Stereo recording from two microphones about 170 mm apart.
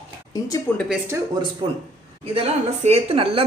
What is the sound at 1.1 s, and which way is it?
Speech, 15° right (ahead or behind).